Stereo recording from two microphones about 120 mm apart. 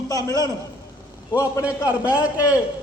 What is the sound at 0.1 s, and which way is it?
Speech, 30° left (ahead or behind).